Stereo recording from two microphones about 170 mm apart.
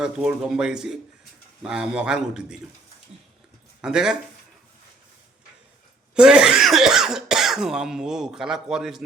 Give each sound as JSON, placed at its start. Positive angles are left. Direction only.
{"t": 0.0, "sound": "speech", "side_deg": -5}
{"t": 3.8, "sound": "speech", "side_deg": -5}
{"t": 6.1, "sound": "speech", "side_deg": -5}